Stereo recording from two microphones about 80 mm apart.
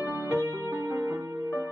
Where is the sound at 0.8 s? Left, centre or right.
Right.